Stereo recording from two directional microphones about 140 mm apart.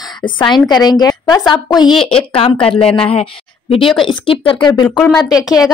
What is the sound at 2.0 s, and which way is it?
A woman's voice, 45° left (ahead or behind).